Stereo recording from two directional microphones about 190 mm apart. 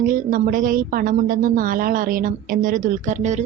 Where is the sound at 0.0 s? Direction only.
45° right (ahead or behind).